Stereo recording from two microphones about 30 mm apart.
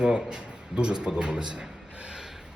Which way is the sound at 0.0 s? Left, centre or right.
Right.